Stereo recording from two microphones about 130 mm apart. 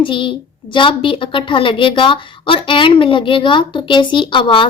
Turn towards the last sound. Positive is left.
turn(degrees=40)  # may be behind; listen again after turning